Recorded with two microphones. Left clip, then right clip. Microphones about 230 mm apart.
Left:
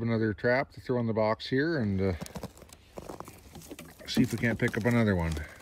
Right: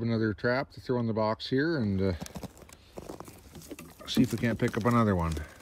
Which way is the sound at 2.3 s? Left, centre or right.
Centre.